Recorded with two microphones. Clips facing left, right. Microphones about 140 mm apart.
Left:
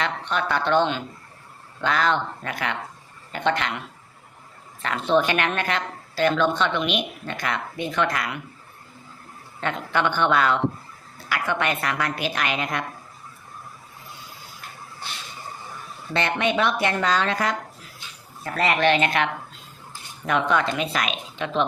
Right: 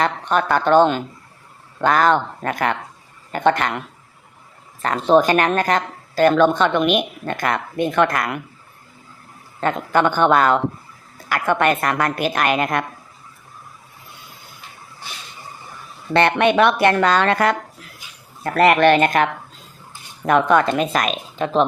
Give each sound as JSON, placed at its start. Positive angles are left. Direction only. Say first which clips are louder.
{"t": 0.0, "sound": "a woman's voice", "louder": "right 6 dB", "side_deg": -45}
{"t": 9.6, "sound": "a woman's voice", "louder": "right 6 dB", "side_deg": -45}
{"t": 16.1, "sound": "a woman's voice", "louder": "right 8 dB", "side_deg": -60}